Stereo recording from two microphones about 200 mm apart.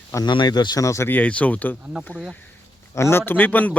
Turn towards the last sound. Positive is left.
turn(degrees=10)  # may be behind; listen again after turning